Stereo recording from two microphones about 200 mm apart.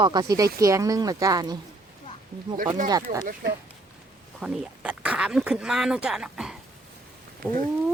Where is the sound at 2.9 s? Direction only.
20° right (ahead or behind).